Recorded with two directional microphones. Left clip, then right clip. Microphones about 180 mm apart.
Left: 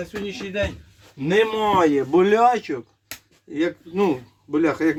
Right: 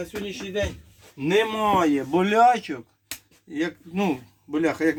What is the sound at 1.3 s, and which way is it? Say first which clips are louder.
Speech: left 2 dB; 10° right (ahead or behind).